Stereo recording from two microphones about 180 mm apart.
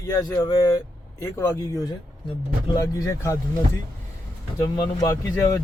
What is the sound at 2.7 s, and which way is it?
Speech, 20° left (ahead or behind).